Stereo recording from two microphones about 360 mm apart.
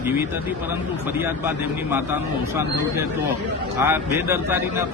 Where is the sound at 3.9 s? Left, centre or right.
Centre.